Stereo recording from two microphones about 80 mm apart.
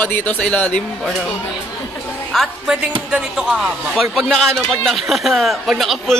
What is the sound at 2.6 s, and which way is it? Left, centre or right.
A woman's voice, centre.